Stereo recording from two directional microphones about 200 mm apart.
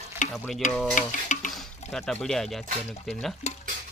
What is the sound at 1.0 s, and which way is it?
Stir, 40° left (ahead or behind).